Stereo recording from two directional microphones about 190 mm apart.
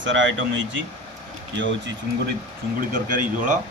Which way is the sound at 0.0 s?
80° right.